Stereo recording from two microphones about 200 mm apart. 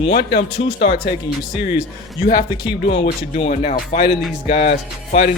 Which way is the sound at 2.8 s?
60° left (ahead or behind).